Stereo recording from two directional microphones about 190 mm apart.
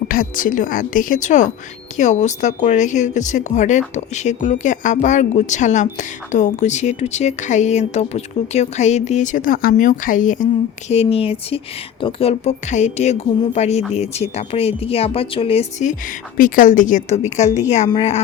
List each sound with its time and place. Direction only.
0.1 s a woman's voice: 45° left (ahead or behind); by 18.2 s 30° left (ahead or behind)